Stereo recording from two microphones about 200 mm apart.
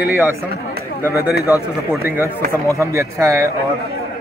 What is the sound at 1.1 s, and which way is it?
Speech, 50° left (ahead or behind).